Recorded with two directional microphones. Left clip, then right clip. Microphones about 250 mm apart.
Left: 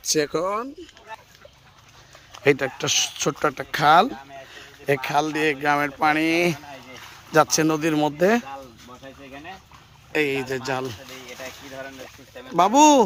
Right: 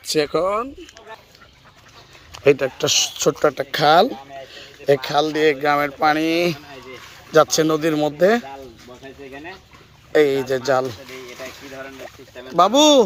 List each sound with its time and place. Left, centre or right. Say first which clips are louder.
0.1 s speech: right 4 dB; centre
2.4 s speech: right 4 dB; centre
10.1 s speech: right 7 dB; centre
12.5 s speech: right 2 dB; centre